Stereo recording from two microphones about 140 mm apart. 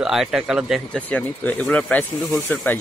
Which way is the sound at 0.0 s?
5° right (ahead or behind).